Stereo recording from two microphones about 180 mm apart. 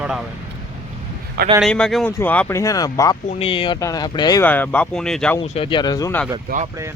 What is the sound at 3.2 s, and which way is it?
Speech, 35° left (ahead or behind).